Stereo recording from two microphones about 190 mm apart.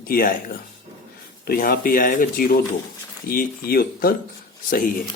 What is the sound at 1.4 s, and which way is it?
A man's voice, 50° left (ahead or behind).